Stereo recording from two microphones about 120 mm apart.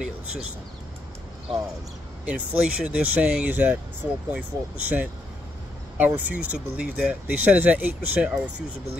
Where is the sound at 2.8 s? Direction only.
10° right (ahead or behind).